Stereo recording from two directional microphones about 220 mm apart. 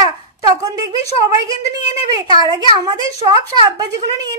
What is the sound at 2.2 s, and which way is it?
Speech, 15° right (ahead or behind).